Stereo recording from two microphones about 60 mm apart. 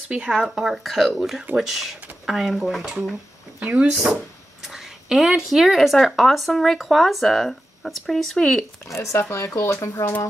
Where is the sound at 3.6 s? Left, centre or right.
Centre.